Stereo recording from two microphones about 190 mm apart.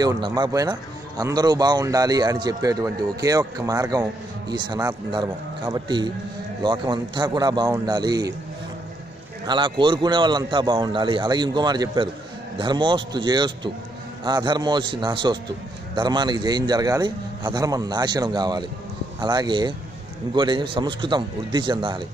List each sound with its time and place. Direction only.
0.0 s a man's voice: 20° right (ahead or behind)
9.5 s a man's voice: 25° right (ahead or behind)